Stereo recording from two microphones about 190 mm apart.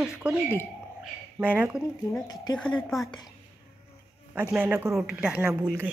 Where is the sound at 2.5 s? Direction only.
5° left (ahead or behind).